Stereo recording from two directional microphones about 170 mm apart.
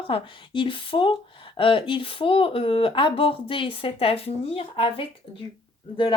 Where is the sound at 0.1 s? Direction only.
30° left (ahead or behind).